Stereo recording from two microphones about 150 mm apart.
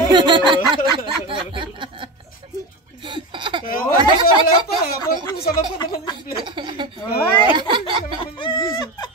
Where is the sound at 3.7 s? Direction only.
70° left (ahead or behind).